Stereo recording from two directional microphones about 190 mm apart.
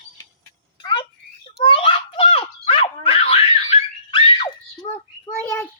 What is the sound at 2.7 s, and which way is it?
Dog, 30° left (ahead or behind).